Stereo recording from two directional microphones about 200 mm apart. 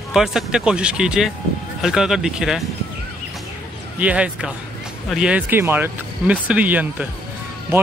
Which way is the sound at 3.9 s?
5° right (ahead or behind).